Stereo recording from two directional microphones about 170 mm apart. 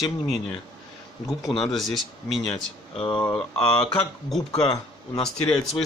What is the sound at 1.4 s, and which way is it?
A man's voice, centre (ahead or behind).